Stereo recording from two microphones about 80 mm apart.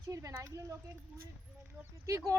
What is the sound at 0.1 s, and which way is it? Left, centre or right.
Speech, right.